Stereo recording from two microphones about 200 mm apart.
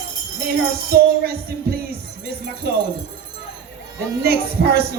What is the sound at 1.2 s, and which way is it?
Music, 50° right (ahead or behind).